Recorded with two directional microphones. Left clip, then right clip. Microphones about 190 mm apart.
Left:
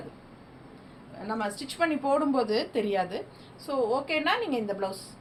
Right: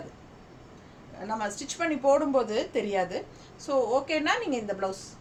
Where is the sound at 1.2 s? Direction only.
15° right (ahead or behind).